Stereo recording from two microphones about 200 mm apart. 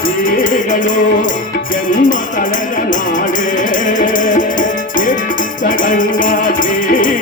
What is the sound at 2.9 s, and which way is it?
Music, 40° left (ahead or behind).